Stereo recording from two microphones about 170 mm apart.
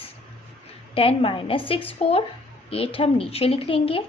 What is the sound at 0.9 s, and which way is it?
Speech, 35° left (ahead or behind).